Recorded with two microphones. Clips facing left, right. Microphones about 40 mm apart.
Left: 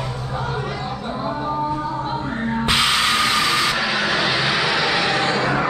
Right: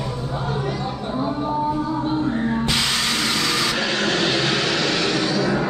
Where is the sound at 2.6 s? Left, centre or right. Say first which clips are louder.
Left 4 dB; left.